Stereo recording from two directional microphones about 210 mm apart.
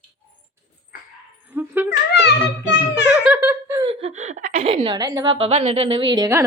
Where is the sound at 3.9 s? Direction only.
30° right (ahead or behind).